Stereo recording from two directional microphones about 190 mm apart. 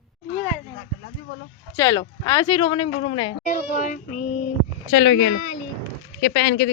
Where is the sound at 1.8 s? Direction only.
20° left (ahead or behind).